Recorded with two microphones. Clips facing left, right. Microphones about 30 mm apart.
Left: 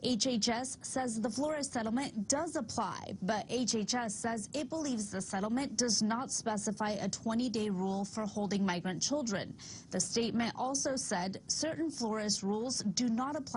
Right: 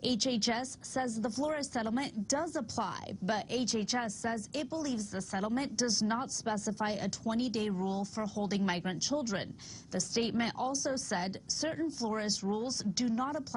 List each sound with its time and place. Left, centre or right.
0.4 s a woman's voice: centre
3.6 s a woman's voice: centre
4.3 s a woman's voice: right